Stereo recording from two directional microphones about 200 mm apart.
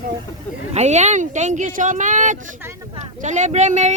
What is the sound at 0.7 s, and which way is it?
Speech, 35° right (ahead or behind).